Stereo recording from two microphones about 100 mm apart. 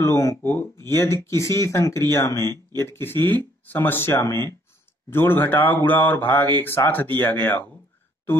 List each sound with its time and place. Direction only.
0.0 s speech: 30° left (ahead or behind)